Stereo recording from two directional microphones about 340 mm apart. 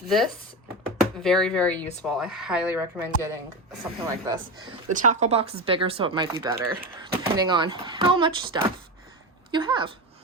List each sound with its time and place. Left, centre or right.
0.1 s speech: centre